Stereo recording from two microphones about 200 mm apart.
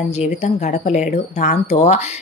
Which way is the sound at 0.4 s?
35° left (ahead or behind).